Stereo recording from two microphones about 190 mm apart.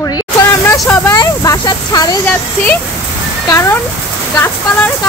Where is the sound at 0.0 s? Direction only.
15° left (ahead or behind).